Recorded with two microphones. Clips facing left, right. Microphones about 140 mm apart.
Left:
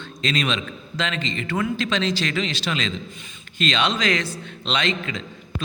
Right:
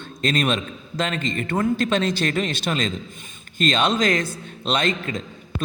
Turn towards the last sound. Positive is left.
turn(degrees=-45)  # may be behind; listen again after turning